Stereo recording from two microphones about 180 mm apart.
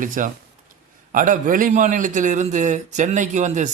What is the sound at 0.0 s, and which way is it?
A man's voice, 45° right (ahead or behind).